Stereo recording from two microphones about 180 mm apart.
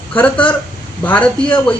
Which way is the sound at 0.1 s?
5° left (ahead or behind).